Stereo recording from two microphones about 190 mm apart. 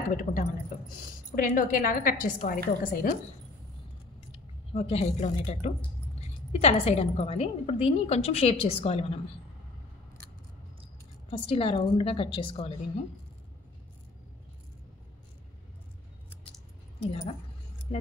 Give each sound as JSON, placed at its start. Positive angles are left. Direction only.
{"t": 0.2, "sound": "a woman's voice", "side_deg": 45}
{"t": 4.3, "sound": "a woman's voice", "side_deg": 30}
{"t": 11.2, "sound": "a woman's voice", "side_deg": 30}
{"t": 17.0, "sound": "a woman's voice", "side_deg": 30}